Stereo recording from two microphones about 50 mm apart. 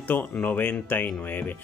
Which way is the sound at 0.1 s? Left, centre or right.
Left.